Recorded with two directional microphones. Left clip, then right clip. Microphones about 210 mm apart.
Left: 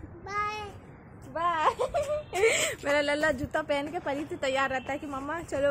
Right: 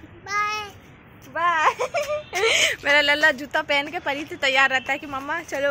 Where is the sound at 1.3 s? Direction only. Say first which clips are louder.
Right 6 dB; 10° right (ahead or behind).